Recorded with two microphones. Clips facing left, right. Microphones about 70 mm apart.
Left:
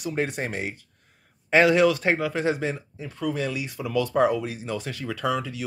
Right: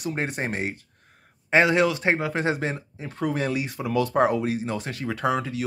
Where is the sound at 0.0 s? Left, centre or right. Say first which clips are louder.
Left 1 dB; right.